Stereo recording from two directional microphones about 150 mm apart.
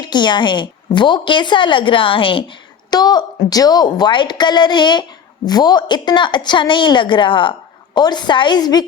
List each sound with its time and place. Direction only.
0.0 s a woman's voice: 30° left (ahead or behind)